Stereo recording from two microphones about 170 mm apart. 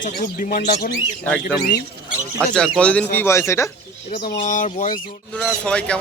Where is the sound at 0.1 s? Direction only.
50° left (ahead or behind).